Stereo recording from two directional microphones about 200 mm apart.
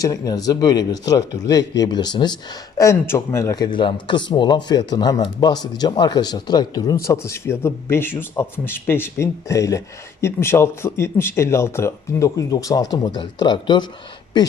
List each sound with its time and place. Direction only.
0.0 s speech: 20° left (ahead or behind)